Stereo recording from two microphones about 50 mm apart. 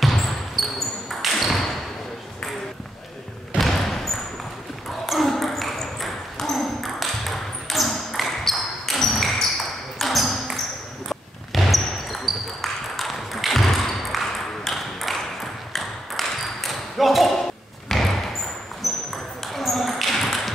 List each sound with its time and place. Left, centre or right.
0.6 s basketball bounce: centre
3.5 s a sound: centre
5.0 s ping: centre
11.1 s basketball bounce: centre
12.6 s ping: centre
17.8 s slam: centre
18.8 s ping: centre